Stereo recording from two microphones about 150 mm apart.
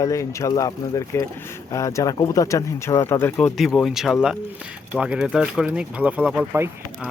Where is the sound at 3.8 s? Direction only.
Centre (ahead or behind).